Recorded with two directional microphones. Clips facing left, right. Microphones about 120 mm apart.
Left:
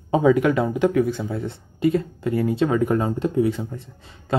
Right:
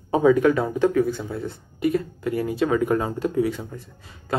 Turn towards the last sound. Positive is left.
turn(degrees=25)  # may be behind; listen again after turning